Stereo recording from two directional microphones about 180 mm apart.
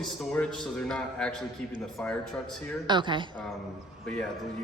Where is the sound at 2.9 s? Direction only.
25° right (ahead or behind).